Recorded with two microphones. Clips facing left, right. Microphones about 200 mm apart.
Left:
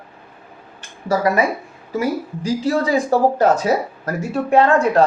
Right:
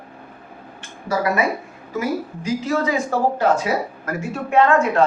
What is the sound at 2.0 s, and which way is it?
Speech, 35° left (ahead or behind).